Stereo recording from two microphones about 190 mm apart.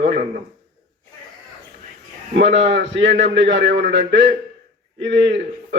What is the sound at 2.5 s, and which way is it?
A man's voice, 70° right (ahead or behind).